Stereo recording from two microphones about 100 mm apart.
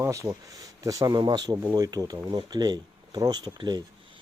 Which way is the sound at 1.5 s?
30° right (ahead or behind).